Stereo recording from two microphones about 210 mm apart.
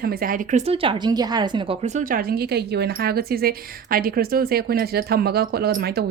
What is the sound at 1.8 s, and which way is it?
A woman's voice, 35° right (ahead or behind).